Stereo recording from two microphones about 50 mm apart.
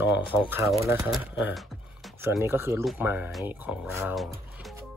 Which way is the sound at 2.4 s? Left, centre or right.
Right.